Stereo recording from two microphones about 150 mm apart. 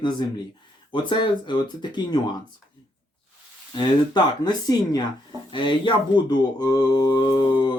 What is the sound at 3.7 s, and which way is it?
Speech, 30° left (ahead or behind).